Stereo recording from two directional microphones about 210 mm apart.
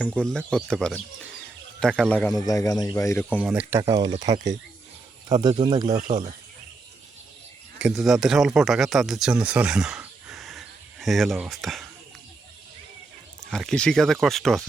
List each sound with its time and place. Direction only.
0.0 s speech: 5° left (ahead or behind)
2.3 s speech: 15° left (ahead or behind)
3.2 s speech: 5° right (ahead or behind)
6.0 s speech: 35° right (ahead or behind)
7.8 s speech: 5° right (ahead or behind)
13.5 s speech: 5° left (ahead or behind)